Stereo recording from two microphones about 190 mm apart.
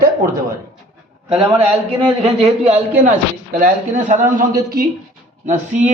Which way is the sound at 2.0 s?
30° right (ahead or behind).